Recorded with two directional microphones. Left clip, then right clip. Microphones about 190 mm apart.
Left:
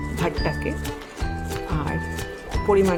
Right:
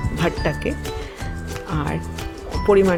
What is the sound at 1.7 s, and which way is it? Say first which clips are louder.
Speech: right 4 dB; 15° right (ahead or behind).